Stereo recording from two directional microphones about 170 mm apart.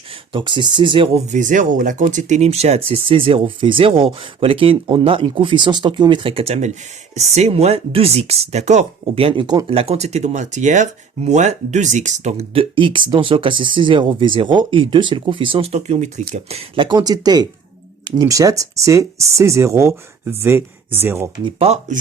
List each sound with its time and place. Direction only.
0.3 s speech: 25° right (ahead or behind)
1.3 s speech: 50° right (ahead or behind); by 21.2 s 15° right (ahead or behind)
21.4 s speech: 40° right (ahead or behind)